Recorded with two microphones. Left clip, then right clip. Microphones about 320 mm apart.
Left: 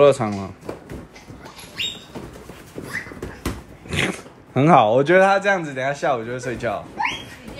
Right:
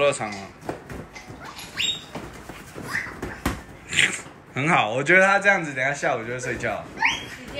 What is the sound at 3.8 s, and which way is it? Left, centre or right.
Speech, centre.